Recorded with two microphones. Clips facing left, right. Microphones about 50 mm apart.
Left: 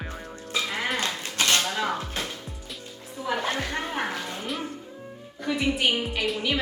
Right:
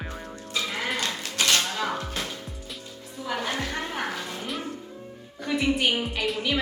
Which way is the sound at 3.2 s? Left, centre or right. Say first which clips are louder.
Left 2 dB; centre.